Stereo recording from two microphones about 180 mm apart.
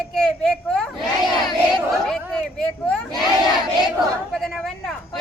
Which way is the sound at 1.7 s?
Centre (ahead or behind).